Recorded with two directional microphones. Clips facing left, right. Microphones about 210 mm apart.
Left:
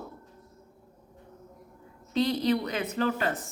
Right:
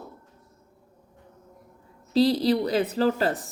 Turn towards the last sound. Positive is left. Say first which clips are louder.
# right 5 dB
turn(degrees=-35)  # may be behind; listen again after turning